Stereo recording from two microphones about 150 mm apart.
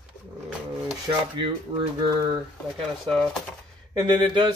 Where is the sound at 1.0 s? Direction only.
30° right (ahead or behind).